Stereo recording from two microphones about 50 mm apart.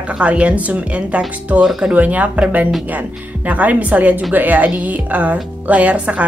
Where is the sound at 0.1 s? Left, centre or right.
Right.